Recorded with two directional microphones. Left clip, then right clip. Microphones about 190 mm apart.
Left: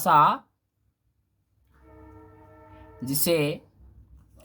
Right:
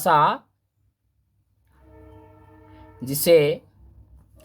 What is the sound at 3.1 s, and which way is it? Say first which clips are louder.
Speech: right 8 dB; 35° right (ahead or behind).